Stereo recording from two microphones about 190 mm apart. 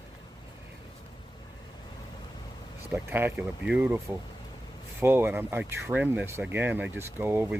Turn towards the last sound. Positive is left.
turn(degrees=-10)  # may be behind; listen again after turning